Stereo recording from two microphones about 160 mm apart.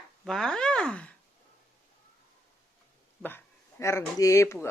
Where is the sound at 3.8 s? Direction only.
20° left (ahead or behind).